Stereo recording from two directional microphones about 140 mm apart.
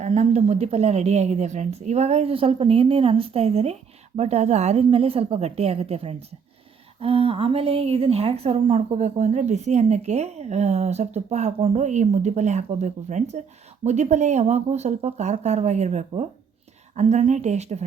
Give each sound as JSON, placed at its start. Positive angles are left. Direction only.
{"t": 0.0, "sound": "a woman's voice", "side_deg": -55}